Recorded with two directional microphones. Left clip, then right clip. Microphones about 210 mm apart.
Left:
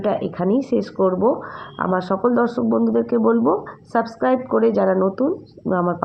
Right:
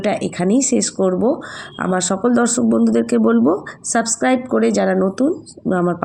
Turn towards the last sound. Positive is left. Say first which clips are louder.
# right 2 dB
turn(degrees=-30)  # may be behind; listen again after turning